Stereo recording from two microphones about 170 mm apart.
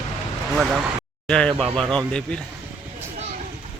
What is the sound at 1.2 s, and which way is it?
Speech, 5° left (ahead or behind).